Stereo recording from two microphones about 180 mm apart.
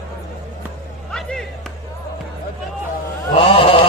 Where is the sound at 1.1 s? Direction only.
5° left (ahead or behind).